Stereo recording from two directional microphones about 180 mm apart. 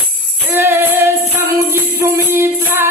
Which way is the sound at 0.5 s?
15° right (ahead or behind).